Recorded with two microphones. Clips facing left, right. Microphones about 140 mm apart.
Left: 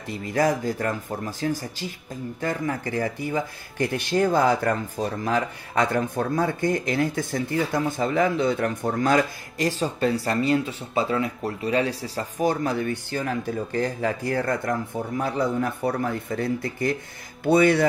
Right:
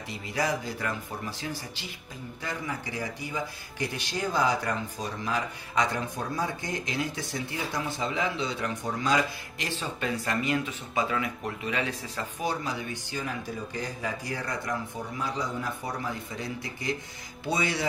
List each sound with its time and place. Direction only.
0.1 s speech: 50° left (ahead or behind)
9.6 s speech: 40° left (ahead or behind); by 17.8 s 55° left (ahead or behind)